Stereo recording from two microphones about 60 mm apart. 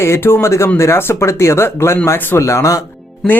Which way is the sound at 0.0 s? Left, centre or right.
Left.